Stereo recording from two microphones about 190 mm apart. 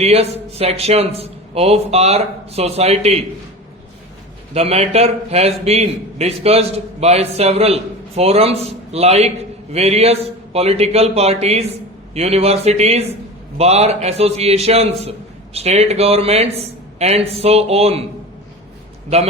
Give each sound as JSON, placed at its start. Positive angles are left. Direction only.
{"t": 0.0, "sound": "a man's voice", "side_deg": -35}
{"t": 4.5, "sound": "a man's voice", "side_deg": -30}